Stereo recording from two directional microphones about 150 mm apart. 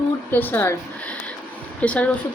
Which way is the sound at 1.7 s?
10° left (ahead or behind).